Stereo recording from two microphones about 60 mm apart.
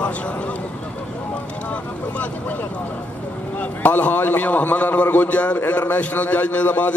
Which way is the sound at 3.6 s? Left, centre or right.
Left.